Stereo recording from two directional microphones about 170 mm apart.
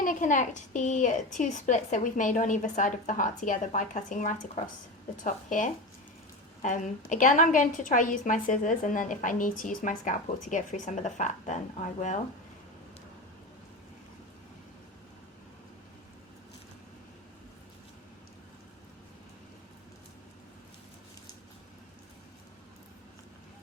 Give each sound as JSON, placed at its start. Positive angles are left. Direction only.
{"t": 0.0, "sound": "a woman's voice", "side_deg": 50}